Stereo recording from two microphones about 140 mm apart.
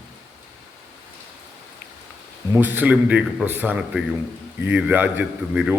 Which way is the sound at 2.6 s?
15° right (ahead or behind).